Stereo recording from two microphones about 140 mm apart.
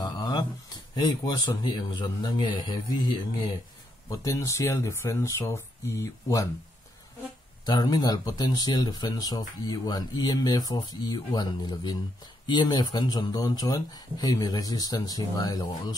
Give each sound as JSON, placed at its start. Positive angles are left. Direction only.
{"t": 0.0, "sound": "a sound", "side_deg": 30}
{"t": 0.9, "sound": "a man's voice", "side_deg": 30}
{"t": 7.6, "sound": "speech", "side_deg": 30}